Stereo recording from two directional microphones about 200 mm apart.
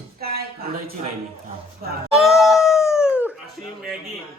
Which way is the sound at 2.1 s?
Centre (ahead or behind).